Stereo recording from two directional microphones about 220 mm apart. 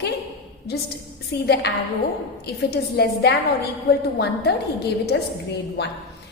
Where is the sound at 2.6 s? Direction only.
45° left (ahead or behind).